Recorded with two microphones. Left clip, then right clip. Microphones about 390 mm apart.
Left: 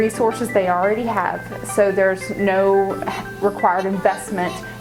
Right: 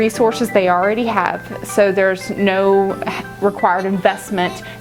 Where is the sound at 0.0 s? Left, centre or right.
Right.